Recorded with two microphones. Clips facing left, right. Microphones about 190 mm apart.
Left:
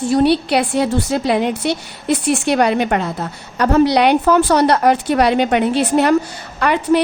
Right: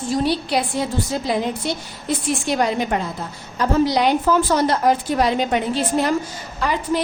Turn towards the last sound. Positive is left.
turn(degrees=65)  # may be behind; listen again after turning